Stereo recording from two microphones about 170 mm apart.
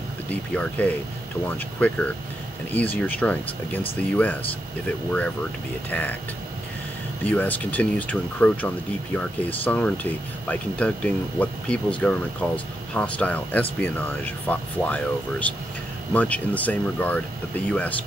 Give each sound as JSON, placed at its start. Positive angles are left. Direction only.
{"t": 0.3, "sound": "speech", "side_deg": 10}
{"t": 5.9, "sound": "speech", "side_deg": 10}
{"t": 7.2, "sound": "speech", "side_deg": 10}